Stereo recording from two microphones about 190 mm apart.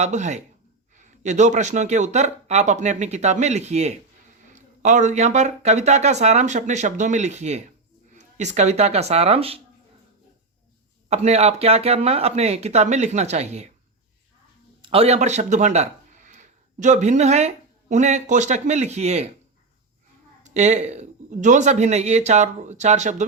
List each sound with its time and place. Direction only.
0.0 s speech: 40° right (ahead or behind)
11.1 s speech: 35° right (ahead or behind)
14.8 s speech: 30° right (ahead or behind)
20.4 s speech: 35° right (ahead or behind)